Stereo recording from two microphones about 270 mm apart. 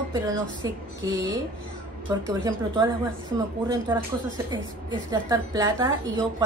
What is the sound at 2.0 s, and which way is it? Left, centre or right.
Speech, centre.